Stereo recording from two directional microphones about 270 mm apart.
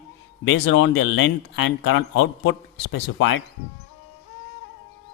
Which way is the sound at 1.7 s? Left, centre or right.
Left.